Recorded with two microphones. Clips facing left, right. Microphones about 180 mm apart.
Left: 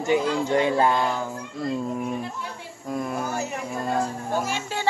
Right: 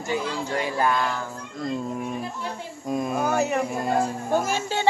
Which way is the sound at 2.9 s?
20° right (ahead or behind).